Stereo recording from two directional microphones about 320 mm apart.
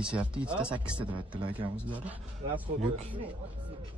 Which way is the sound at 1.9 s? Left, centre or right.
Centre.